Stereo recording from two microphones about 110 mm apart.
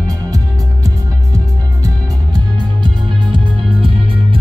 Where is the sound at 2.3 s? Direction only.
40° right (ahead or behind).